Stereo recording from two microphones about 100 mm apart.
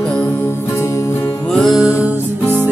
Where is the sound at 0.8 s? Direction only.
30° left (ahead or behind).